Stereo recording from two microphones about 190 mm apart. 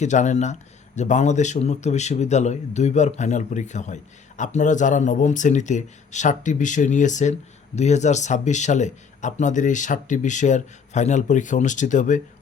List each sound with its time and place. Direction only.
0.0 s a man's voice: 40° left (ahead or behind)